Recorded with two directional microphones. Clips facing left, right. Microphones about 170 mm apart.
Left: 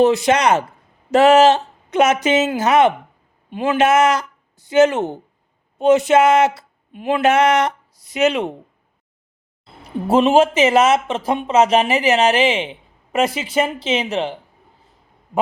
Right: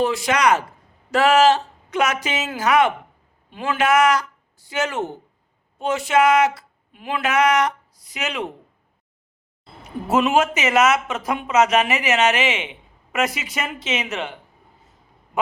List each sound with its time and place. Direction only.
0.0 s speech: 20° left (ahead or behind)
10.1 s speech: 30° left (ahead or behind)